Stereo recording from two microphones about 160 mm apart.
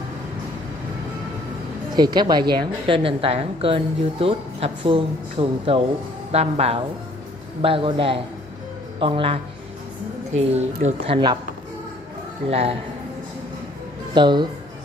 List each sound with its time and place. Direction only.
2.0 s a woman's voice: 25° right (ahead or behind); by 11.1 s 45° right (ahead or behind)
12.4 s a woman's voice: 40° right (ahead or behind)
14.1 s speech: 30° right (ahead or behind)